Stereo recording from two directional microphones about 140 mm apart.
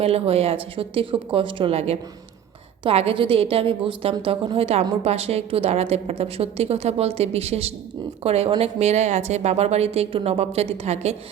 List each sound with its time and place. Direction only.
0.0 s a woman's voice: 45° right (ahead or behind)